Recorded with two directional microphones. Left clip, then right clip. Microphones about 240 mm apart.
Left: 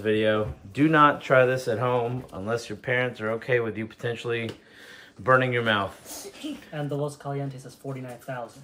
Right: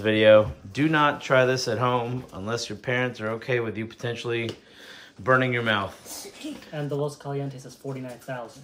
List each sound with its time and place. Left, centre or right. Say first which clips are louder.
0.0 s speech: right 7 dB; centre
0.7 s speech: left 3 dB; centre